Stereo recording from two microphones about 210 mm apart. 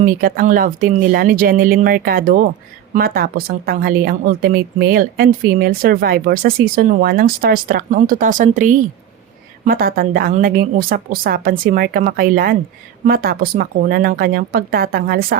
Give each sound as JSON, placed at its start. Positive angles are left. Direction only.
{"t": 0.0, "sound": "a woman's voice", "side_deg": -40}